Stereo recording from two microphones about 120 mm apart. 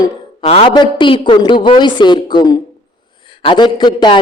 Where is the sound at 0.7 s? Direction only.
40° left (ahead or behind).